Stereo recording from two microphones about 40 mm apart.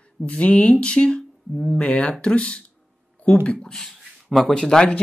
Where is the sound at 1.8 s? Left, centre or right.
Left.